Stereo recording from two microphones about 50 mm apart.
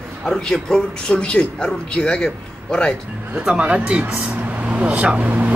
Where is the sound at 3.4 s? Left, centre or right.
Right.